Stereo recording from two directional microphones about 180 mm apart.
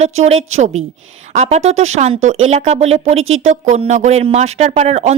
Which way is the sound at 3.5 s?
40° right (ahead or behind).